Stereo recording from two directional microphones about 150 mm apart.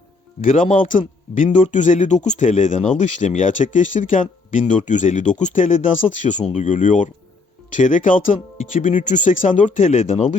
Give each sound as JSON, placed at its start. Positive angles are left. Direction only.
{"t": 0.4, "sound": "speech", "side_deg": 60}